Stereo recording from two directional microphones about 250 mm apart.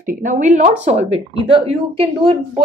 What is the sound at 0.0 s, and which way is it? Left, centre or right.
A woman's voice, right.